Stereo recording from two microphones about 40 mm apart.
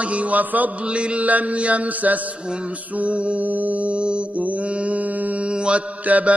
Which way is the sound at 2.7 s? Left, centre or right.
Right.